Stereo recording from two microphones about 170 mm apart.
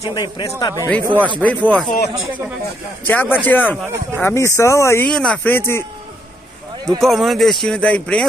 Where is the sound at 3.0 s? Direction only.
10° left (ahead or behind).